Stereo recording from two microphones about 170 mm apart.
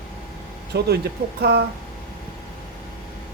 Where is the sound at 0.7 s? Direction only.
70° right (ahead or behind).